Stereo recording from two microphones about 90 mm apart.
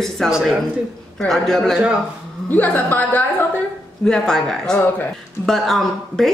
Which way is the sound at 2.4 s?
20° left (ahead or behind).